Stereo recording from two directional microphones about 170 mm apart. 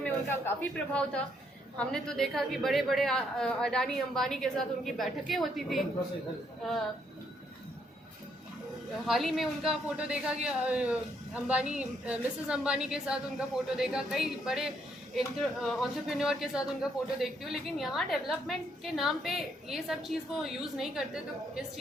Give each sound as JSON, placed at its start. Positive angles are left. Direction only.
{"t": 0.0, "sound": "a man's voice", "side_deg": 10}
{"t": 9.0, "sound": "a woman's voice", "side_deg": 0}